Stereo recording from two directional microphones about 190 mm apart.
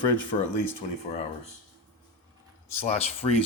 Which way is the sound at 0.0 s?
25° left (ahead or behind).